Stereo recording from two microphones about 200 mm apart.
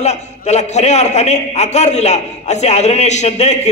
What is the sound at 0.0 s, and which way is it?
A man's voice, 35° left (ahead or behind).